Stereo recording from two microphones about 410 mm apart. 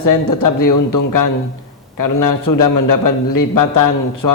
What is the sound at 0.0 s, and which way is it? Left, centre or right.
A man's voice, left.